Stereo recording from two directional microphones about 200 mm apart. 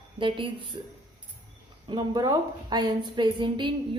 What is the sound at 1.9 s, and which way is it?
A woman's voice, 20° right (ahead or behind).